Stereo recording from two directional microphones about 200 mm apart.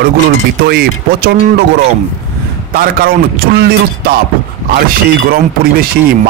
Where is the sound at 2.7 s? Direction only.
50° right (ahead or behind).